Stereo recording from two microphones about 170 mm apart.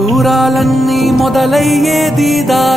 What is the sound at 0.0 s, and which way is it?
Music, centre (ahead or behind).